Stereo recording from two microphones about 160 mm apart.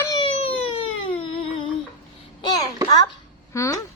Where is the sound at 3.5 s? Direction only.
20° left (ahead or behind).